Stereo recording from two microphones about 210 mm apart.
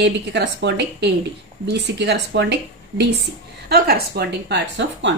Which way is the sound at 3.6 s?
50° right (ahead or behind).